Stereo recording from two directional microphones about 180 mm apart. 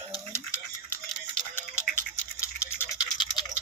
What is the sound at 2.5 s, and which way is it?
Tick-tock, 15° left (ahead or behind).